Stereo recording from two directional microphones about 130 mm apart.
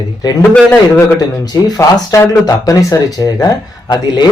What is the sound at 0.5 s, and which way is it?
Speech, 15° left (ahead or behind).